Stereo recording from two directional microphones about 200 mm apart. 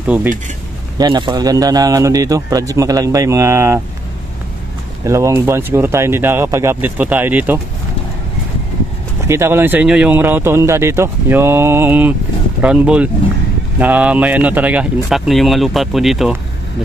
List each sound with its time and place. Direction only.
0.0 s speech: 10° right (ahead or behind)
0.9 s speech: 20° right (ahead or behind)
5.0 s speech: 15° right (ahead or behind)
9.3 s speech: 10° right (ahead or behind)